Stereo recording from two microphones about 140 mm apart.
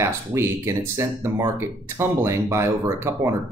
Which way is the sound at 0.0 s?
20° right (ahead or behind).